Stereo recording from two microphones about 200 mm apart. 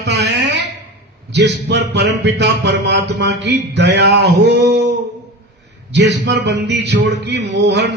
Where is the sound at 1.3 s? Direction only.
60° right (ahead or behind).